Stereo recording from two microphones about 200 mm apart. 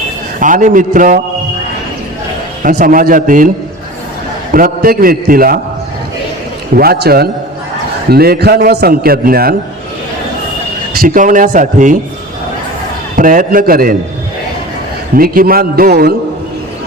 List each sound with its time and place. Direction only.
0.3 s a man's voice: 40° right (ahead or behind)
2.6 s a man's voice: 45° right (ahead or behind)
4.5 s a man's voice: 45° right (ahead or behind)
6.7 s a man's voice: 50° right (ahead or behind)
10.9 s a man's voice: 45° right (ahead or behind)
13.1 s a man's voice: 45° right (ahead or behind)
15.1 s a man's voice: 45° right (ahead or behind)